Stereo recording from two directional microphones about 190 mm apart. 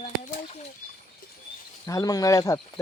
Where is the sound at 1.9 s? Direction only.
20° left (ahead or behind).